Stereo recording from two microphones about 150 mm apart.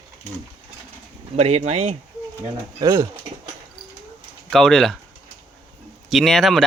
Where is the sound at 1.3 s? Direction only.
45° right (ahead or behind).